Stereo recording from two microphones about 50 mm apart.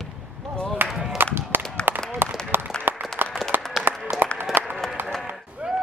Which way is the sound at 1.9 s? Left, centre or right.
Right.